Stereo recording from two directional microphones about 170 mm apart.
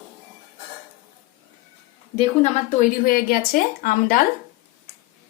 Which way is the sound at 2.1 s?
40° left (ahead or behind).